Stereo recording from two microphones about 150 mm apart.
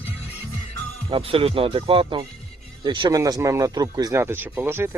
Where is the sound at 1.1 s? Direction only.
40° right (ahead or behind).